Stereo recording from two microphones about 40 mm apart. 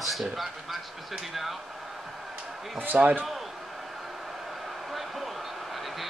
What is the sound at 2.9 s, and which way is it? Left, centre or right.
Speech, right.